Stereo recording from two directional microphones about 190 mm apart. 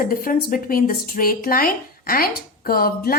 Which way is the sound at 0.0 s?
45° left (ahead or behind).